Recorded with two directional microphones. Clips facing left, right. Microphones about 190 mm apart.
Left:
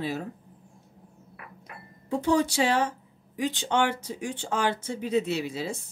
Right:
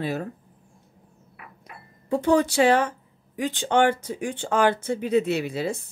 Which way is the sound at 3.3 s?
55° right (ahead or behind).